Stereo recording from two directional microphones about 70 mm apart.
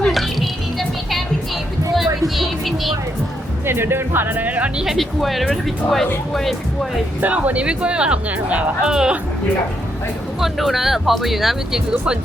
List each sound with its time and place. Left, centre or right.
0.0 s music: centre
2.2 s music: centre
3.7 s speech: right
4.8 s speech: centre
7.2 s speech: right
10.4 s speech: centre